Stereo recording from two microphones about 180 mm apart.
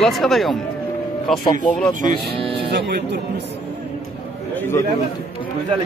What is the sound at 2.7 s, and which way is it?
Speech, 65° right (ahead or behind).